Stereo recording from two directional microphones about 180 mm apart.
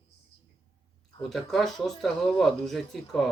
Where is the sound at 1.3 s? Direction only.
Centre (ahead or behind).